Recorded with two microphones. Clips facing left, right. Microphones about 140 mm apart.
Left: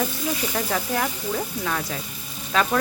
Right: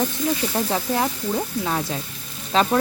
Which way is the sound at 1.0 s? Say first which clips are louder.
Right 3 dB; 30° right (ahead or behind).